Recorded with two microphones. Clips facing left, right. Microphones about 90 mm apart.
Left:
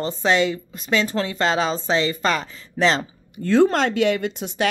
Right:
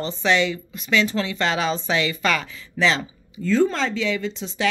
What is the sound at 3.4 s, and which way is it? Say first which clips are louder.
Speech: left 3 dB; 65° left (ahead or behind).